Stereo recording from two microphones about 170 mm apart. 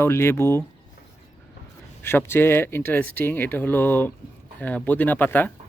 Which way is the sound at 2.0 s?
15° left (ahead or behind).